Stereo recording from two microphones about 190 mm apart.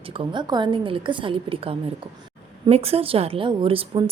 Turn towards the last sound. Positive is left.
turn(degrees=-30)  # may be behind; listen again after turning